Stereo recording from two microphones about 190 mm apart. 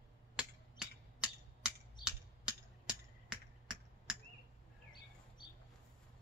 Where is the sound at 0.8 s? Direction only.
5° right (ahead or behind).